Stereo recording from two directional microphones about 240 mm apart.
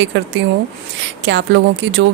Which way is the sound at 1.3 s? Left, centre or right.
Right.